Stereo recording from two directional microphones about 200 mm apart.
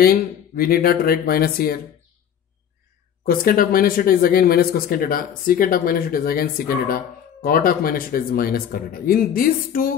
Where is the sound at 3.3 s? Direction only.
45° left (ahead or behind).